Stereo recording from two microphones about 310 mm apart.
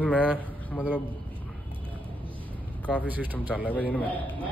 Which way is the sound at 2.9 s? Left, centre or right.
Centre.